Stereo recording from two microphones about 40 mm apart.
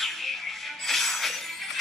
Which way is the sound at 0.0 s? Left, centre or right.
Centre.